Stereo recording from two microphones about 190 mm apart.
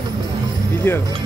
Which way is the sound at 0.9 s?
10° left (ahead or behind).